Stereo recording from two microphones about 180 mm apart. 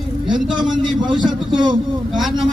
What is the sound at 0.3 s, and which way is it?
Speech, 5° right (ahead or behind).